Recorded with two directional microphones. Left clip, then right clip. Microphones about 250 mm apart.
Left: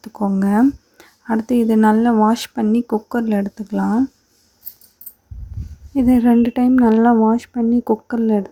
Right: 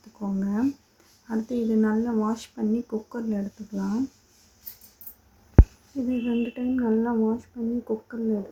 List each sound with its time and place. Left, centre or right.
0.0 s speech: left
6.1 s speech: left